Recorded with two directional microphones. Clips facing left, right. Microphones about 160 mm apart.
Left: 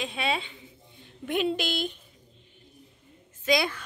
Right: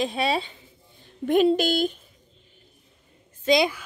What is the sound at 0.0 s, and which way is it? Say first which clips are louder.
A woman's voice: right 6 dB; 35° right (ahead or behind).